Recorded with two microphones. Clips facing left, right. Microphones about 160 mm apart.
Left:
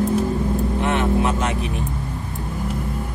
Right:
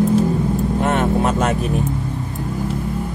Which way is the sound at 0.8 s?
45° right (ahead or behind).